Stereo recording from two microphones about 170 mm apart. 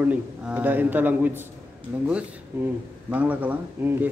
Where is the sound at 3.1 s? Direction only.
10° right (ahead or behind).